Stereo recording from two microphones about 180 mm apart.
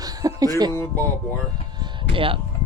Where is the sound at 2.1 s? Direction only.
30° right (ahead or behind).